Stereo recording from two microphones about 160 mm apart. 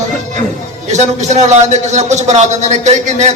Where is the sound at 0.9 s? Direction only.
45° right (ahead or behind).